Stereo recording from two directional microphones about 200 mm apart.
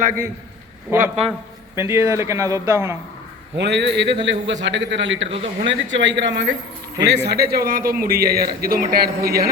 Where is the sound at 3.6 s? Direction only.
60° right (ahead or behind).